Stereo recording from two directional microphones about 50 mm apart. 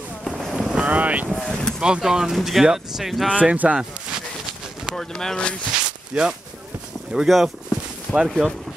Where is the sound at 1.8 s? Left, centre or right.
Centre.